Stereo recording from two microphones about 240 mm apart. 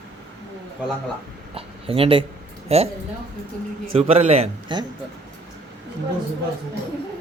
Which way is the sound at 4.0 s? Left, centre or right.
Right.